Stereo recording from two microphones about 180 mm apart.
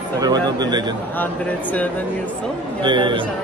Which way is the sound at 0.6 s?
25° right (ahead or behind).